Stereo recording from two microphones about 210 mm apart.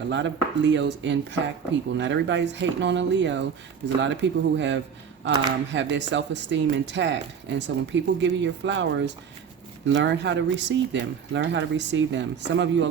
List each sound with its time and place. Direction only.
0.1 s speech: 60° right (ahead or behind)